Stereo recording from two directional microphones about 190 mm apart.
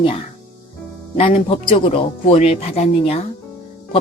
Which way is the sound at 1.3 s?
30° left (ahead or behind).